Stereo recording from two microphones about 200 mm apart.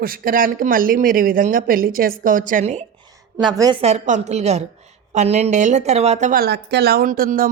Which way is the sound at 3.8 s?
35° right (ahead or behind).